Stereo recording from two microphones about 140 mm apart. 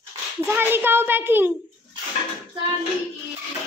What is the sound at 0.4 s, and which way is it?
Speech, 15° right (ahead or behind).